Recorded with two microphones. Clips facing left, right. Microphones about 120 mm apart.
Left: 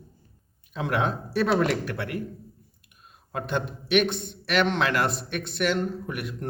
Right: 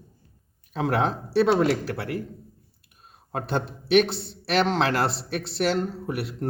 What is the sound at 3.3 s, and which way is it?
Speech, 35° right (ahead or behind).